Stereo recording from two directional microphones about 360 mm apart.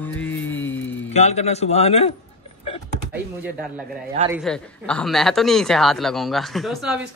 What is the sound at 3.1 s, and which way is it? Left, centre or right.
Speech, centre.